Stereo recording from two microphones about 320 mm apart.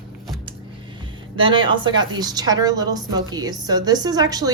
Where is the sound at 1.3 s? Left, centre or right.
Centre.